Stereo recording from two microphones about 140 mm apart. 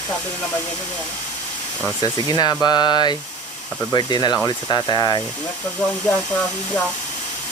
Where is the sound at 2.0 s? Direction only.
30° left (ahead or behind).